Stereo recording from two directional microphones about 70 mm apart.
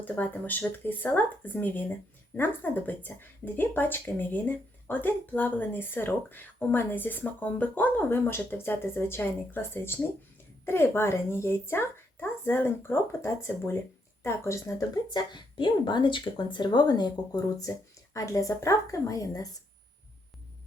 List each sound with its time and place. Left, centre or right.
0.0 s a woman's voice: left
15.1 s speech: left
17.7 s a woman's voice: left